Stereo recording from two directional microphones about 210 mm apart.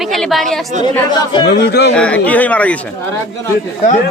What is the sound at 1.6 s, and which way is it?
Speech, 50° left (ahead or behind).